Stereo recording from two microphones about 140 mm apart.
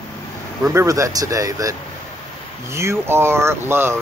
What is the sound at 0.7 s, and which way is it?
Speech, 20° right (ahead or behind).